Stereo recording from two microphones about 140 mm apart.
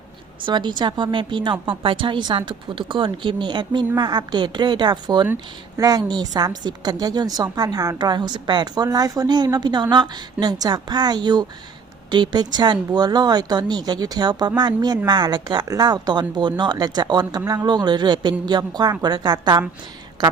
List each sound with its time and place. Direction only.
0.4 s speech: 35° right (ahead or behind)